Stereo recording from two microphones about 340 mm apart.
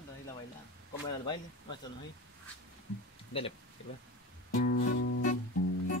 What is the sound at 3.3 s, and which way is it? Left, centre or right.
Speech, centre.